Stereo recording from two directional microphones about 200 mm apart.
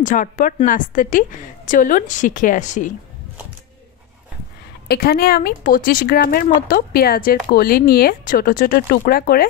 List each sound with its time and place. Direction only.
0.0 s a woman's voice: 40° left (ahead or behind)
4.8 s speech: 50° left (ahead or behind)